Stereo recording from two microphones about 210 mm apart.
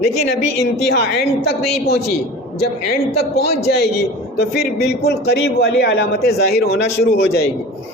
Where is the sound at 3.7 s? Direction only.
50° left (ahead or behind).